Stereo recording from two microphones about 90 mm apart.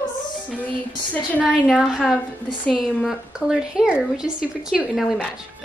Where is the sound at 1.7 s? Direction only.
5° right (ahead or behind).